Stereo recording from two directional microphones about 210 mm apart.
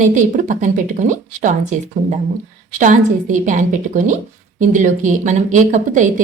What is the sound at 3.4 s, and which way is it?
A woman's voice, 35° right (ahead or behind).